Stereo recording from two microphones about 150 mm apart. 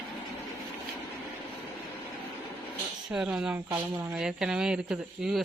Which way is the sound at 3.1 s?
5° right (ahead or behind).